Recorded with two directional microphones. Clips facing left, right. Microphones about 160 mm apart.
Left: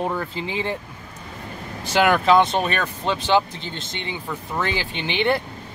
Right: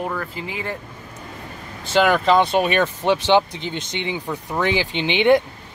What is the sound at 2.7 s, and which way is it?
Speech, 15° right (ahead or behind).